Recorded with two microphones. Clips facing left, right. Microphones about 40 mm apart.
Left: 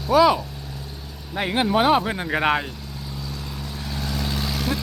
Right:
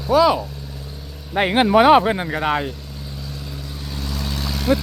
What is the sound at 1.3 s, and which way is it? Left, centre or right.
Speech, right.